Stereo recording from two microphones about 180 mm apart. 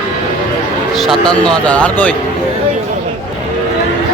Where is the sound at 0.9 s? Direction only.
Centre (ahead or behind).